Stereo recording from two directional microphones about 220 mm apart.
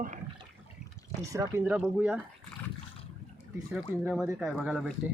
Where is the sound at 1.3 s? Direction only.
10° right (ahead or behind).